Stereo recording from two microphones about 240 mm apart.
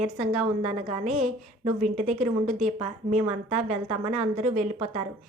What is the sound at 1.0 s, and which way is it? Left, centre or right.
Speech, right.